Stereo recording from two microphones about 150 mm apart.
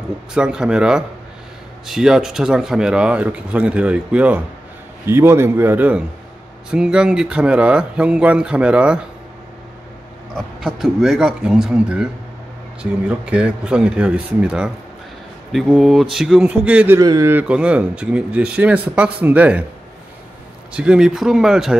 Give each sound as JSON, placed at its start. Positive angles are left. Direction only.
{"t": 0.3, "sound": "speech", "side_deg": -5}
{"t": 10.3, "sound": "speech", "side_deg": 0}
{"t": 13.2, "sound": "speech", "side_deg": -5}
{"t": 17.0, "sound": "a man's voice", "side_deg": -25}
{"t": 17.3, "sound": "speech", "side_deg": -10}
{"t": 20.7, "sound": "speech", "side_deg": -5}